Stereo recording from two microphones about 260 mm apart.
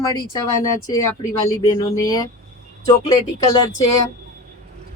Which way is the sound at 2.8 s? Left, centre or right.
Centre.